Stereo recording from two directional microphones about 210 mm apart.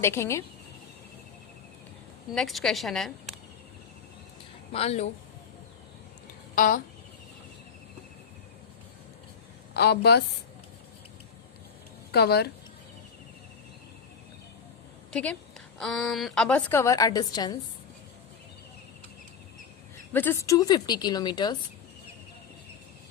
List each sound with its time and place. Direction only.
0.0 s a woman's voice: 10° left (ahead or behind)
2.3 s a woman's voice: centre (ahead or behind)
4.7 s a woman's voice: 30° left (ahead or behind)
6.6 s speech: 40° left (ahead or behind)
9.7 s a woman's voice: 50° left (ahead or behind)
12.1 s a woman's voice: 50° left (ahead or behind)
15.1 s a woman's voice: 5° left (ahead or behind)
20.1 s a woman's voice: 10° left (ahead or behind)